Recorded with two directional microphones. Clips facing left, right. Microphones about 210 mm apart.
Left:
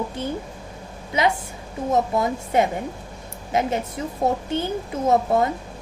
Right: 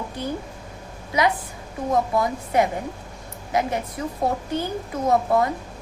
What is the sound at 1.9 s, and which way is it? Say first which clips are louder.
A woman's voice: left 1 dB; 25° left (ahead or behind).